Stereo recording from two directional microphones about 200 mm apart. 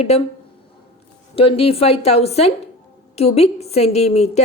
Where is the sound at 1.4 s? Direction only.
30° left (ahead or behind).